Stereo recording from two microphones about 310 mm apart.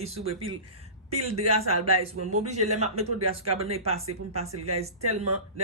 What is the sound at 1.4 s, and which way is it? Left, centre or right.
Speech, right.